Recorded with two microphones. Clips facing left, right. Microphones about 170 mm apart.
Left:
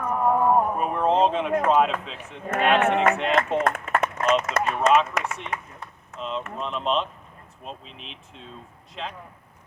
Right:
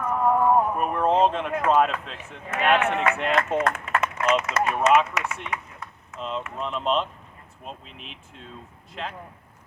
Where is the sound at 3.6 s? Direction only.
50° left (ahead or behind).